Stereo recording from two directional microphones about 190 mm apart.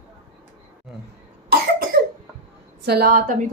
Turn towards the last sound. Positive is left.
turn(degrees=-50)  # may be behind; listen again after turning